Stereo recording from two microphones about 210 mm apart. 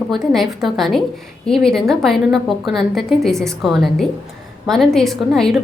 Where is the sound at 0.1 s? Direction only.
Centre (ahead or behind).